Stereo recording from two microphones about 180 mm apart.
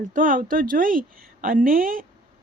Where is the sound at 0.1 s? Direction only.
50° right (ahead or behind).